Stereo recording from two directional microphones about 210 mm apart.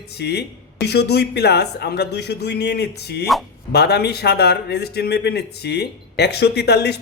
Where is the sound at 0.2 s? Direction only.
50° left (ahead or behind).